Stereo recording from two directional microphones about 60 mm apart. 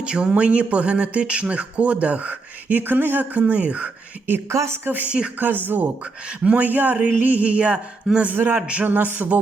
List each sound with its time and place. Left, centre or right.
0.0 s speech: centre
4.4 s speech: right
4.9 s speech: right
6.4 s speech: centre
8.3 s speech: right
8.6 s speech: centre
8.9 s speech: right